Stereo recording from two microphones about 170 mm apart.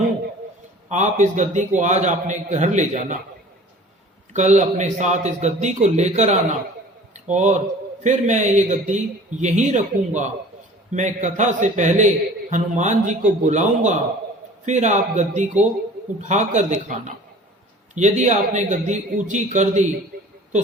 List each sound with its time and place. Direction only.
0.9 s a man's voice: 45° right (ahead or behind)
4.3 s a man's voice: 45° right (ahead or behind)